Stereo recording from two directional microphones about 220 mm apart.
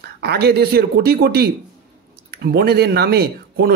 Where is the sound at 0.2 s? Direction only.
45° right (ahead or behind).